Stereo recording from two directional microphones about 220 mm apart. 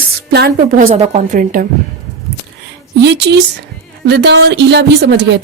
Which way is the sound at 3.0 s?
50° right (ahead or behind).